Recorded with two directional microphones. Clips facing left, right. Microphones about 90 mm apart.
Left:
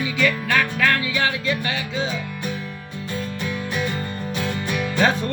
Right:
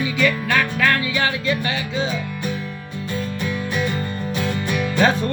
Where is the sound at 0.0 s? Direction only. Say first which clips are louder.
Right 2 dB; 30° right (ahead or behind).